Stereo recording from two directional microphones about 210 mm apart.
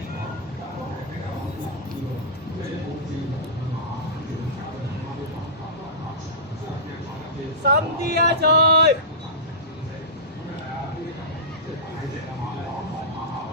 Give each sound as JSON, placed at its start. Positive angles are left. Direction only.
{"t": 7.6, "sound": "speech", "side_deg": -50}